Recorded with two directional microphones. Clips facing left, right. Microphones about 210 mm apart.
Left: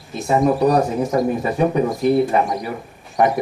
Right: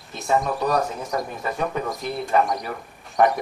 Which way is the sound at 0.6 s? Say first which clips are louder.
Left 7 dB; 25° left (ahead or behind).